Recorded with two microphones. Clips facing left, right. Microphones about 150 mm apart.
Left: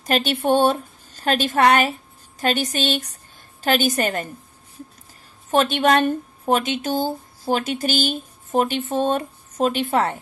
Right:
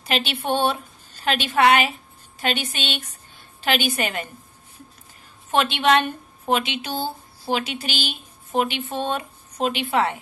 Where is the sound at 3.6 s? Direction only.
40° left (ahead or behind).